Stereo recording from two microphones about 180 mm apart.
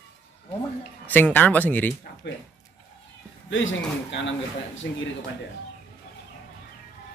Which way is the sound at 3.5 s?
90° left.